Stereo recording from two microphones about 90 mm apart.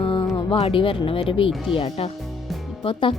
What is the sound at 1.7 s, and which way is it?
Speech, 90° left.